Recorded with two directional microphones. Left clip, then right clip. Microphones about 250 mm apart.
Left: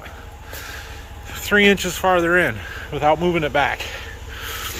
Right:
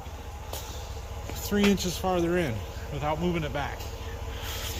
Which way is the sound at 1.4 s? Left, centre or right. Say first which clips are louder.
Left 11 dB; centre.